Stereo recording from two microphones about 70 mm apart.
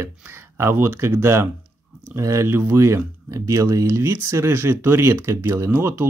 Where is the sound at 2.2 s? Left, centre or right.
Right.